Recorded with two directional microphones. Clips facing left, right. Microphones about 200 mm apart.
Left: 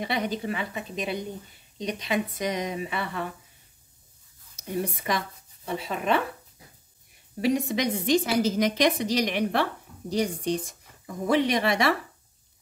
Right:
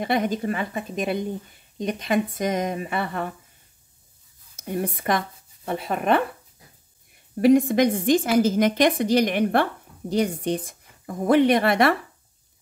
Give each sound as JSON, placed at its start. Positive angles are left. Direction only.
{"t": 0.0, "sound": "a woman's voice", "side_deg": -50}
{"t": 4.6, "sound": "a woman's voice", "side_deg": -55}
{"t": 7.4, "sound": "a woman's voice", "side_deg": -50}